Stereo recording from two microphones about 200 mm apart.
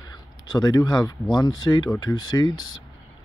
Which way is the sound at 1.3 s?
20° left (ahead or behind).